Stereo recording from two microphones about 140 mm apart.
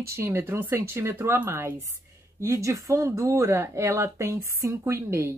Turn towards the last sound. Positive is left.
turn(degrees=-20)  # may be behind; listen again after turning